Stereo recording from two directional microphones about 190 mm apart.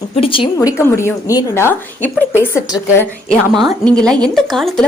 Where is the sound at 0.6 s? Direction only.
15° left (ahead or behind).